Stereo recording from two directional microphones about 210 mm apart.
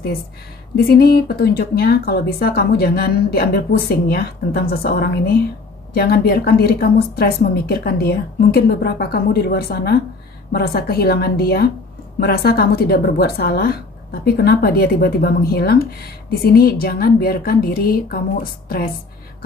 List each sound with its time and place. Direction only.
0.7 s speech: 45° left (ahead or behind)